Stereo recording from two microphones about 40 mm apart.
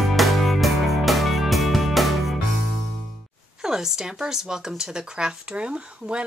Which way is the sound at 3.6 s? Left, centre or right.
Centre.